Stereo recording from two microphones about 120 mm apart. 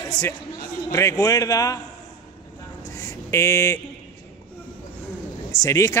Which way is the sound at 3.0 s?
25° left (ahead or behind).